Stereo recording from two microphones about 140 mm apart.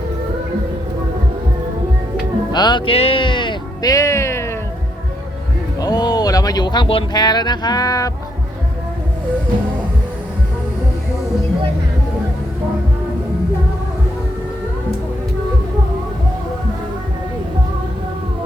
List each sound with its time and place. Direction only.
2.5 s music: 30° left (ahead or behind)
5.8 s speech: 30° left (ahead or behind)